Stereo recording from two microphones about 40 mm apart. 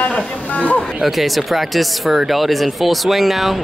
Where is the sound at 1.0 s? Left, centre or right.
Centre.